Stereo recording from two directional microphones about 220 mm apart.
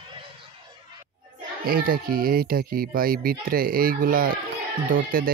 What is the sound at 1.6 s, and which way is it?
Speech, 40° right (ahead or behind).